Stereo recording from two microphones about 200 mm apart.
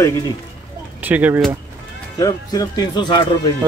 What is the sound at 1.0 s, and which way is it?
Speech, 10° right (ahead or behind).